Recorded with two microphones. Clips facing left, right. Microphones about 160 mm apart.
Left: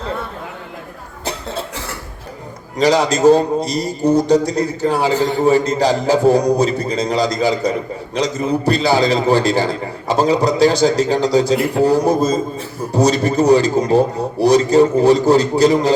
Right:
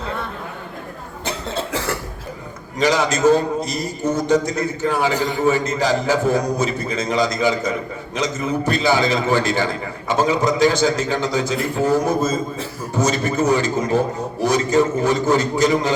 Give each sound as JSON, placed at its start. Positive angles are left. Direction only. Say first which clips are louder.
{"t": 2.7, "sound": "a man's voice", "louder": "left 4 dB", "side_deg": 35}
{"t": 11.5, "sound": "a man's voice", "louder": "left 6 dB", "side_deg": 70}
{"t": 11.8, "sound": "a man's voice", "louder": "left 3 dB", "side_deg": 35}